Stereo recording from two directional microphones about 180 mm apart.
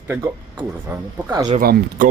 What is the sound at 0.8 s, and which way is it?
Speech, 15° right (ahead or behind).